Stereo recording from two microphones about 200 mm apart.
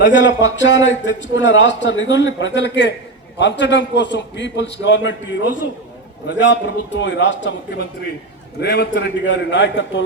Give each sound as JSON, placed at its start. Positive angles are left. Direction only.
{"t": 0.0, "sound": "a man's voice", "side_deg": 65}
{"t": 6.2, "sound": "a man's voice", "side_deg": 65}